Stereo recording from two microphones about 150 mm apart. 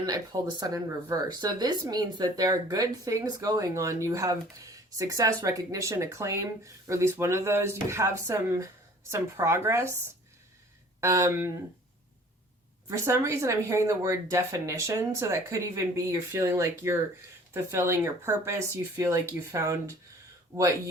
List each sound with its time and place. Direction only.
0.0 s speech: 25° right (ahead or behind)
11.0 s speech: 20° right (ahead or behind)
12.9 s speech: 20° right (ahead or behind)